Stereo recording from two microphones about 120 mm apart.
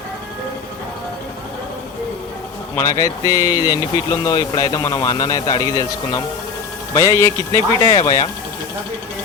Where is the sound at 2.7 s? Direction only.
30° left (ahead or behind).